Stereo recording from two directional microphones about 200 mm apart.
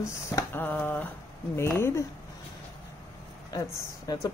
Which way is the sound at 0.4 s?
10° left (ahead or behind).